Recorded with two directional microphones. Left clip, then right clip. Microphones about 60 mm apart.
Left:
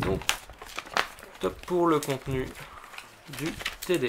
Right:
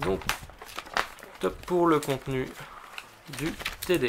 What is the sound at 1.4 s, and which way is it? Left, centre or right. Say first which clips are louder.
Speech: right 1 dB; centre.